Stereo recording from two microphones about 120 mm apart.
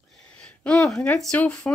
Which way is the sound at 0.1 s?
5° left (ahead or behind).